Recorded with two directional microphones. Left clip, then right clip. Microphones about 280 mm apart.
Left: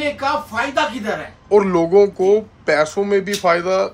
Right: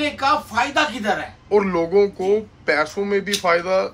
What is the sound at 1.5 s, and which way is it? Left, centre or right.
Speech, centre.